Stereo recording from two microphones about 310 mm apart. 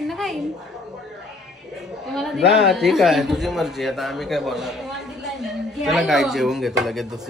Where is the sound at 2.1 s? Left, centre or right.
Centre.